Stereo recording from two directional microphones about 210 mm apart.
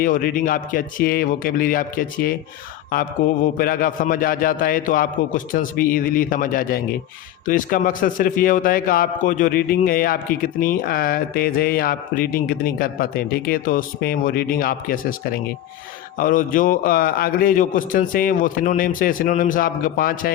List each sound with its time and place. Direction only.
0.0 s a man's voice: 40° left (ahead or behind)